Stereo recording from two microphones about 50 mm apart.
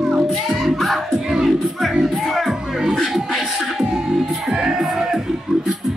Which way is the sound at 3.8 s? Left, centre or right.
Centre.